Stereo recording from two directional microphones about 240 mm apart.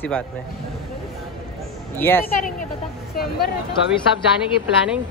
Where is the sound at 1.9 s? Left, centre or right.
Centre.